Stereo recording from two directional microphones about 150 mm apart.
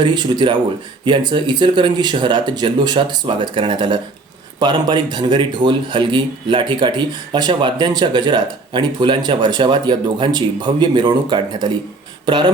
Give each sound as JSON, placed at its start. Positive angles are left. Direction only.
{"t": 0.0, "sound": "speech", "side_deg": -30}